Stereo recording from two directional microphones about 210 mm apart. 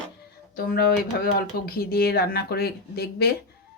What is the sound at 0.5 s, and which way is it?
Speech, 45° left (ahead or behind).